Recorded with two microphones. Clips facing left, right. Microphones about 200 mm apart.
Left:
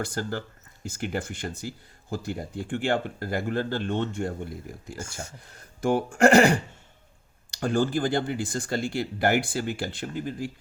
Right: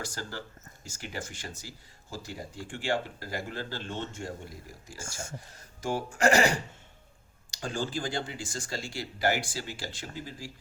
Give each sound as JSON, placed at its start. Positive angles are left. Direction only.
{"t": 0.0, "sound": "speech", "side_deg": 55}